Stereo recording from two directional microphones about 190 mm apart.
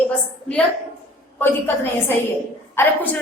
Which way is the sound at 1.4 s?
10° left (ahead or behind).